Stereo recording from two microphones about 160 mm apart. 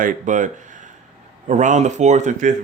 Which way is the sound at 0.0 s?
55° right (ahead or behind).